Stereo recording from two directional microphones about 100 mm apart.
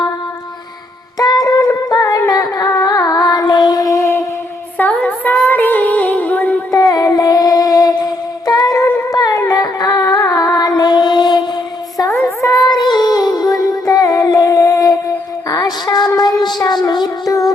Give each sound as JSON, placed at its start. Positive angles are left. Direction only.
{"t": 1.2, "sound": "a sound", "side_deg": 40}
{"t": 4.8, "sound": "female singing", "side_deg": 15}
{"t": 6.7, "sound": "a sound", "side_deg": 40}
{"t": 9.1, "sound": "music", "side_deg": 40}
{"t": 12.2, "sound": "child singing", "side_deg": 30}
{"t": 12.7, "sound": "music", "side_deg": 45}
{"t": 15.4, "sound": "child singing", "side_deg": 40}